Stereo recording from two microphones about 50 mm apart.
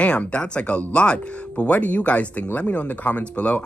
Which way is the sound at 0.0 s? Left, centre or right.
Left.